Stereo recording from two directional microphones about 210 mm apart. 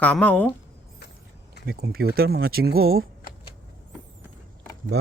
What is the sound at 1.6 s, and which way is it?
Speech, 45° right (ahead or behind).